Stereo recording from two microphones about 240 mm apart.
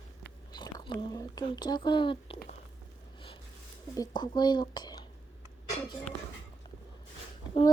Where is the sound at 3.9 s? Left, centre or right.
Centre.